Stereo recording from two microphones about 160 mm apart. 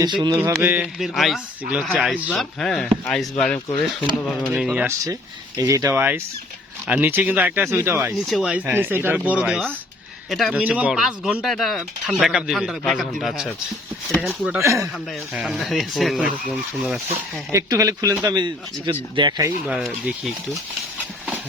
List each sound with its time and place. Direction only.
0.0 s speech: 25° right (ahead or behind)
0.3 s speech: 15° right (ahead or behind)
0.9 s speech: centre (ahead or behind)
4.5 s speech: 5° right (ahead or behind)
5.5 s speech: 20° right (ahead or behind)
8.3 s a man's voice: 5° right (ahead or behind)
10.5 s speech: 10° right (ahead or behind)
14.6 s speech: 20° right (ahead or behind)
15.3 s speech: centre (ahead or behind)
17.5 s speech: 20° right (ahead or behind)
19.6 s speech: 5° right (ahead or behind)